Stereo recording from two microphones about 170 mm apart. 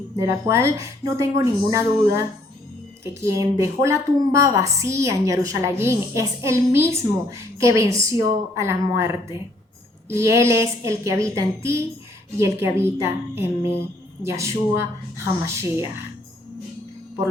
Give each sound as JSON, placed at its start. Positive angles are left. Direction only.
{"t": 0.2, "sound": "a woman's voice", "side_deg": -15}
{"t": 10.1, "sound": "a woman's voice", "side_deg": -15}